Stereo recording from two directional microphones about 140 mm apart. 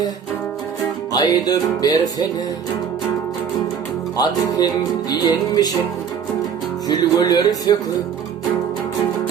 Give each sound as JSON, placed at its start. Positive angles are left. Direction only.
{"t": 1.1, "sound": "music", "side_deg": 30}
{"t": 4.2, "sound": "music", "side_deg": 30}
{"t": 6.8, "sound": "music", "side_deg": 30}